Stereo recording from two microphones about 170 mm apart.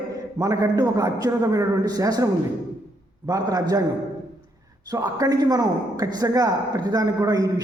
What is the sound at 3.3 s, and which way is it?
Speech, 20° right (ahead or behind).